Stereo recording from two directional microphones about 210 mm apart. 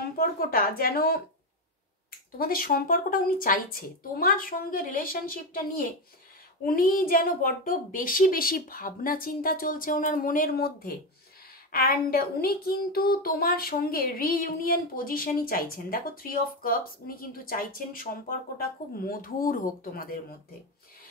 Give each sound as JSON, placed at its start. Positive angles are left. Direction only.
{"t": 0.2, "sound": "speech", "side_deg": 45}
{"t": 2.3, "sound": "speech", "side_deg": 45}